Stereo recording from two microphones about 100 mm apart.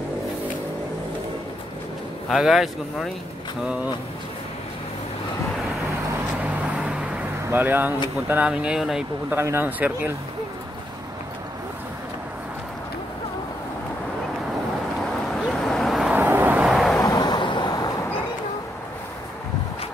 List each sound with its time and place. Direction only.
2.2 s speech: centre (ahead or behind)
6.4 s vehicle: 10° right (ahead or behind)
7.5 s speech: 20° right (ahead or behind)
9.3 s speech: 25° right (ahead or behind)
15.5 s vehicle: 5° left (ahead or behind)
16.1 s vehicle: 20° right (ahead or behind)
16.6 s vehicle: centre (ahead or behind)
17.0 s vehicle: 45° left (ahead or behind)